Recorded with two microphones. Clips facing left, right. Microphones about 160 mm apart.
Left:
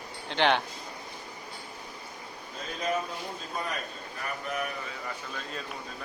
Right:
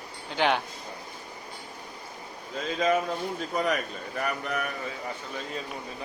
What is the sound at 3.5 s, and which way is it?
Speech, 90° right.